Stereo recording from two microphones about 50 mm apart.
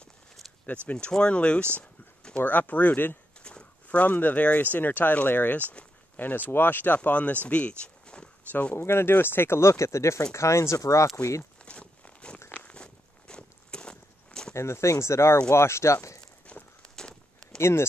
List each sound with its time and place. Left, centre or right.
0.9 s speech: centre
2.4 s speech: left
3.4 s speech: left
7.0 s speech: left
8.7 s speech: left
11.6 s walk: left
14.5 s speech: left
16.5 s walk: left
16.9 s walk: centre
17.6 s speech: left